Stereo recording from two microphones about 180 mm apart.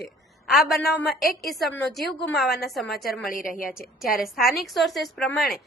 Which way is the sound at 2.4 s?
60° left (ahead or behind).